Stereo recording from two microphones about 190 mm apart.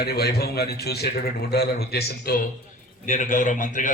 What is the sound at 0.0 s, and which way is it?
A man's voice, 55° left (ahead or behind).